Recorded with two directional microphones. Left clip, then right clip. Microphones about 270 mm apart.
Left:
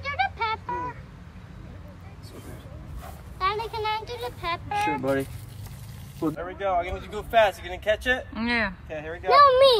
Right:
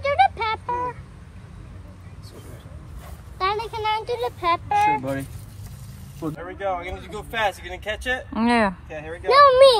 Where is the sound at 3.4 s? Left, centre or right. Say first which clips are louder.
Right 3 dB; right.